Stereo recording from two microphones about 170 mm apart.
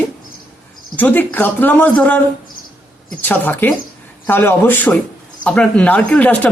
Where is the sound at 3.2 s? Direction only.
10° left (ahead or behind).